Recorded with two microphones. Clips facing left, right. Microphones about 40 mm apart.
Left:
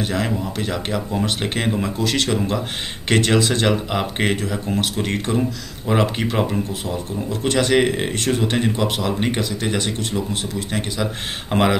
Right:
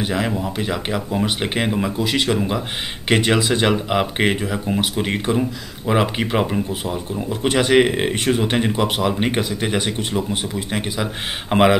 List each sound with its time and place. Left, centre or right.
0.0 s speech: centre